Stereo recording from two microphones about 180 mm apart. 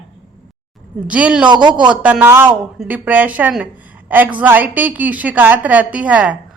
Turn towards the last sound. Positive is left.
turn(degrees=-10)  # may be behind; listen again after turning